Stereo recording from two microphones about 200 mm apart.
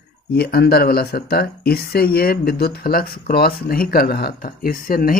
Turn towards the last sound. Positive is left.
turn(degrees=45)  # may be behind; listen again after turning